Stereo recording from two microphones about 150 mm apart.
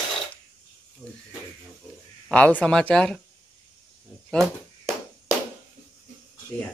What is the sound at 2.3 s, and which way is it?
Speech, 10° left (ahead or behind).